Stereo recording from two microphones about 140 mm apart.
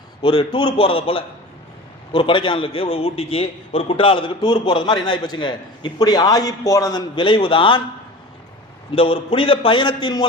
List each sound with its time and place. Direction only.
0.2 s a man's voice: 40° left (ahead or behind)
7.2 s a man's voice: 35° left (ahead or behind)
9.0 s a man's voice: 40° left (ahead or behind)